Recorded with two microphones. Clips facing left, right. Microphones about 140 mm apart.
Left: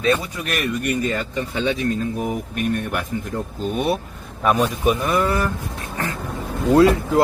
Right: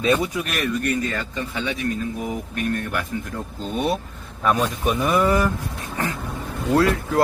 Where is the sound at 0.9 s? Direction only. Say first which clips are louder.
Left 2 dB; 20° left (ahead or behind).